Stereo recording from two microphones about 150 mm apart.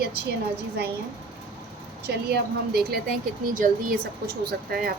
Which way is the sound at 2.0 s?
90° right.